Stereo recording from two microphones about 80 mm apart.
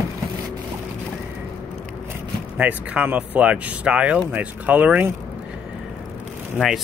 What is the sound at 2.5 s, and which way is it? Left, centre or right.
Speech, centre.